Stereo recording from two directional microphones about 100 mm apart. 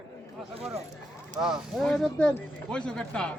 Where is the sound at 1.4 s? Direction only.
5° right (ahead or behind).